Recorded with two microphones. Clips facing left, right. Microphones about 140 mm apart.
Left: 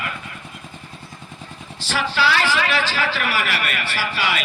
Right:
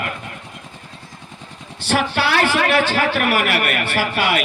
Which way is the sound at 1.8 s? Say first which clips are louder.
Right 2 dB; 60° right (ahead or behind).